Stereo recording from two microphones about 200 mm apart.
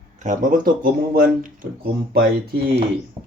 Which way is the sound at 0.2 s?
40° right (ahead or behind).